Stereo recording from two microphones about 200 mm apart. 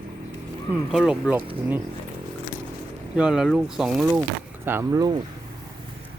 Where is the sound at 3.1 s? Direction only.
5° right (ahead or behind).